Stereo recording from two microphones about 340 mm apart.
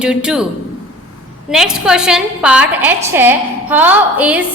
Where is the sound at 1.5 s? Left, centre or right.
Centre.